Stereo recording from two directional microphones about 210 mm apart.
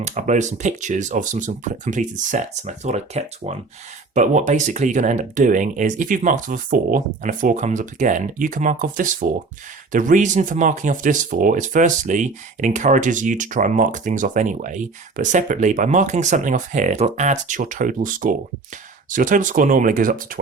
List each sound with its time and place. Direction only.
0.0 s speech: 35° right (ahead or behind)